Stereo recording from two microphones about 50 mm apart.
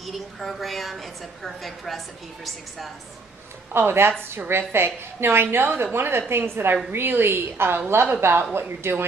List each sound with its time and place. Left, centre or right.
0.0 s a woman's voice: centre
3.7 s a woman's voice: right